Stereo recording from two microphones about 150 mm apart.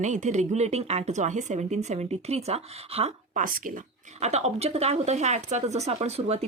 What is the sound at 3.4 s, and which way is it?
Speech, 60° right (ahead or behind).